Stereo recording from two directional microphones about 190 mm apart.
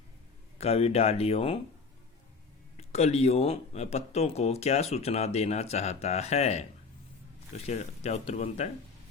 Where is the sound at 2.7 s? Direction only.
35° left (ahead or behind).